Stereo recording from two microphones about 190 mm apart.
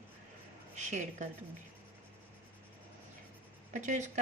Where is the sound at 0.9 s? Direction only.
40° right (ahead or behind).